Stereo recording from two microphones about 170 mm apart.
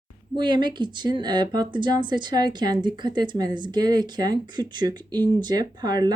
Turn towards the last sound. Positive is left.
turn(degrees=-25)  # may be behind; listen again after turning